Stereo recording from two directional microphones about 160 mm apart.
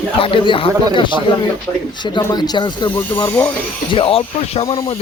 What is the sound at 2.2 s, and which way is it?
Speech, 25° left (ahead or behind).